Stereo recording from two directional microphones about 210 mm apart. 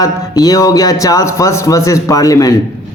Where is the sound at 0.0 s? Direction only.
15° left (ahead or behind).